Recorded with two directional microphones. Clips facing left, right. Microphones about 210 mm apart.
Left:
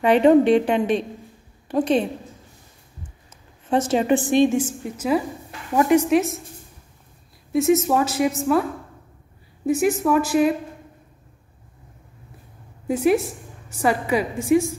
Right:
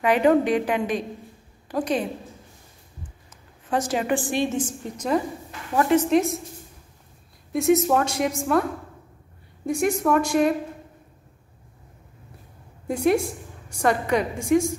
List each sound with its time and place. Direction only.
0.0 s a woman's voice: 25° left (ahead or behind)
3.7 s a woman's voice: 25° left (ahead or behind); by 6.4 s 5° left (ahead or behind)
7.5 s a woman's voice: centre (ahead or behind)
9.7 s a woman's voice: 5° left (ahead or behind)
12.8 s a woman's voice: 5° left (ahead or behind)